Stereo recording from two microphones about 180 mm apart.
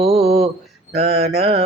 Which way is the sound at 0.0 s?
30° right (ahead or behind).